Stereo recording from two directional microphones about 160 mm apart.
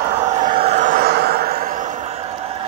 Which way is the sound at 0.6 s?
40° right (ahead or behind).